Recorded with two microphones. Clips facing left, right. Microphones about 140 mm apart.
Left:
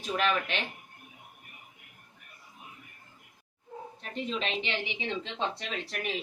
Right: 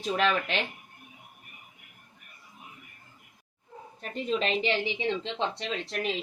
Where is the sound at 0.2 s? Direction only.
30° right (ahead or behind).